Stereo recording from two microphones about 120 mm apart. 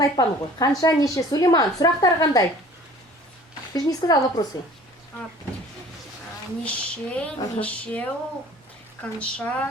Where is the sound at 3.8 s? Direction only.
30° left (ahead or behind).